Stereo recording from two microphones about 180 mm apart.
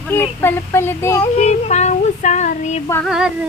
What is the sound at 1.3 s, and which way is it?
Child singing, 40° left (ahead or behind).